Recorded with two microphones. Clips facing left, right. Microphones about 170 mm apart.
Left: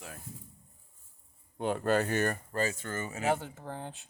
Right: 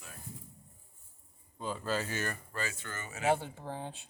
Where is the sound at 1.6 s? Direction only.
65° left (ahead or behind); by 3.0 s 45° left (ahead or behind).